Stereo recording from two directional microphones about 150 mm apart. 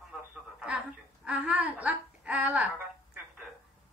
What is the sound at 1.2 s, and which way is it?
A woman's voice, 10° right (ahead or behind).